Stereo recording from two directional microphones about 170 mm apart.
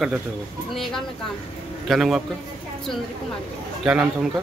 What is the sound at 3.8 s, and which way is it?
Speech, 5° right (ahead or behind).